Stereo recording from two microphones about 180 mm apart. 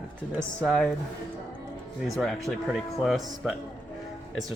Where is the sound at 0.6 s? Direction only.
5° left (ahead or behind).